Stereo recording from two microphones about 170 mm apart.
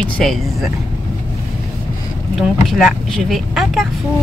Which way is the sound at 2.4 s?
Centre (ahead or behind).